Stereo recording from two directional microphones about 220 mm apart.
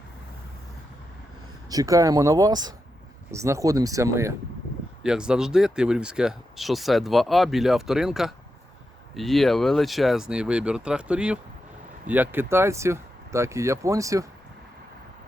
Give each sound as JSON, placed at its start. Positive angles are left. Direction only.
{"t": 1.7, "sound": "speech", "side_deg": -15}